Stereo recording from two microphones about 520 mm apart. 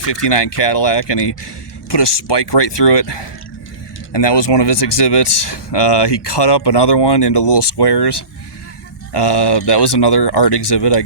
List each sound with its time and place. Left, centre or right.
0.0 s speech: left